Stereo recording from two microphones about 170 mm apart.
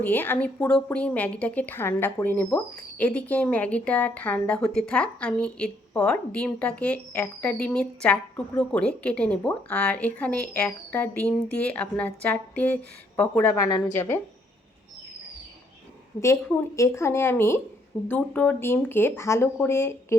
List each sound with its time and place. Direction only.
0.0 s a woman's voice: 10° left (ahead or behind)
16.2 s a woman's voice: 15° left (ahead or behind)